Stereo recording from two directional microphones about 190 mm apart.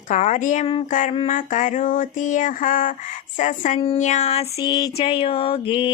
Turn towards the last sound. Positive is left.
turn(degrees=30)  # may be behind; listen again after turning